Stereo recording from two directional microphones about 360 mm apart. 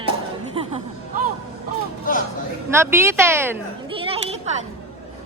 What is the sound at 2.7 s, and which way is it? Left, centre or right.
Speech, centre.